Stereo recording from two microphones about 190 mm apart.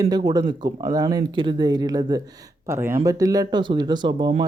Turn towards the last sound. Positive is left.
turn(degrees=-25)  # may be behind; listen again after turning